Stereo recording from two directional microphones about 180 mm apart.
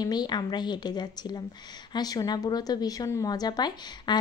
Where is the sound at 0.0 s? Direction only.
25° left (ahead or behind).